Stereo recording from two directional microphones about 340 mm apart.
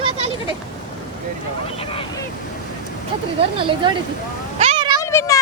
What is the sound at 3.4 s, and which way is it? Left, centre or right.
Speech, centre.